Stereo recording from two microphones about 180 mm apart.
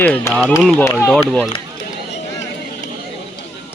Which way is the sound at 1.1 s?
Centre (ahead or behind).